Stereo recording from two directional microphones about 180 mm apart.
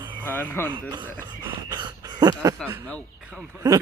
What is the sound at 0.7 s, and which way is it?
Speech, 25° right (ahead or behind).